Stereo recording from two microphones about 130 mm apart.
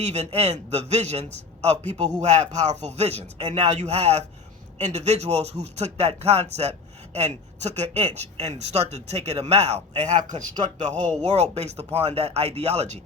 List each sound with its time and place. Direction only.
0.0 s speech: 55° right (ahead or behind)